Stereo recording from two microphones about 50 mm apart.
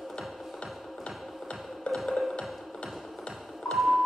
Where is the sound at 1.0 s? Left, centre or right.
Left.